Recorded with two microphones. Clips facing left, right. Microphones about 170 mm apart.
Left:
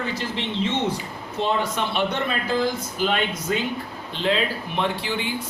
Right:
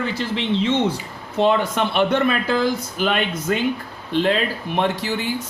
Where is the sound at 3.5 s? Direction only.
60° right (ahead or behind).